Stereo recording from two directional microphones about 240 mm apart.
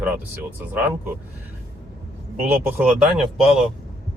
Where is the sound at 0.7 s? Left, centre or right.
Centre.